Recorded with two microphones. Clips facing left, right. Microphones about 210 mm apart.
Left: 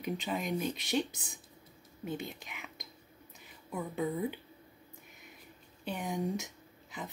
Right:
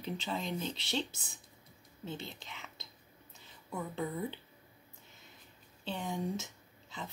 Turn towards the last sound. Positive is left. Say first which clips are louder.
# left 2 dB
turn(degrees=15)  # may be behind; listen again after turning